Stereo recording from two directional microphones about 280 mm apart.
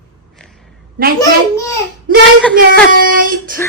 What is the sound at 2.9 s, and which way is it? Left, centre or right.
Child singing, right.